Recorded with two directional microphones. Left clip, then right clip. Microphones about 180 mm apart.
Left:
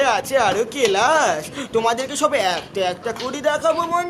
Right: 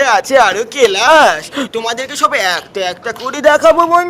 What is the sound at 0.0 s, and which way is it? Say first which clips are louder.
Speech: right 8 dB; 40° right (ahead or behind).